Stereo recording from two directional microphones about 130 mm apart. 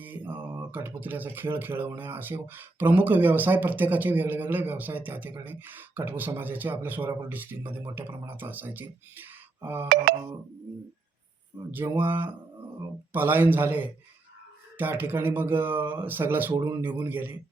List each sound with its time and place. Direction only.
0.0 s mantra: 15° right (ahead or behind)
0.7 s speech: 15° right (ahead or behind)
11.7 s speech: 15° right (ahead or behind)